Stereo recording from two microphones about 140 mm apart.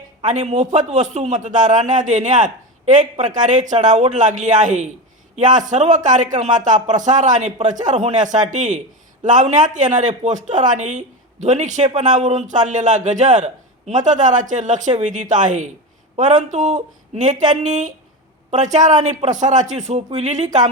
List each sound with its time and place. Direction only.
0.3 s speech: 55° right (ahead or behind)